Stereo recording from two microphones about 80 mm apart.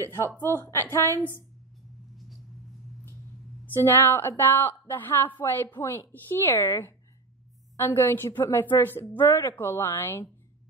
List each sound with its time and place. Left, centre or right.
0.0 s a woman's voice: left
3.8 s a woman's voice: left